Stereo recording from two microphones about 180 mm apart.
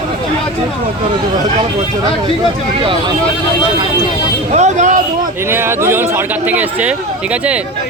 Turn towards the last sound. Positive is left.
turn(degrees=-5)  # may be behind; listen again after turning